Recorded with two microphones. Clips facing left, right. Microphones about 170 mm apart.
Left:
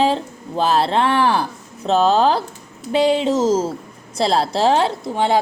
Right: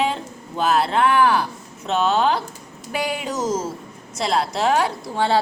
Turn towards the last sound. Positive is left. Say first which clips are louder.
# left 2 dB
turn(degrees=20)  # may be behind; listen again after turning